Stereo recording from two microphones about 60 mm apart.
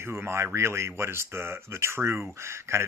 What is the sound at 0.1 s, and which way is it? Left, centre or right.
Speech, right.